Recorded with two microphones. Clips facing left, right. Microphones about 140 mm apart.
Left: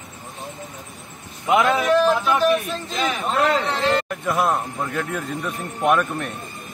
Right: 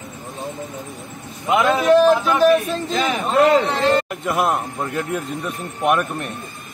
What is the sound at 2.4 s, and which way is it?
Speech, 40° right (ahead or behind).